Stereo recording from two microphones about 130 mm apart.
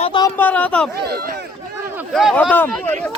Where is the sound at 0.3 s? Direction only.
15° left (ahead or behind).